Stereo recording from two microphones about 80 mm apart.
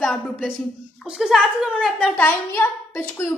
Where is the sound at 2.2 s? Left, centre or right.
Left.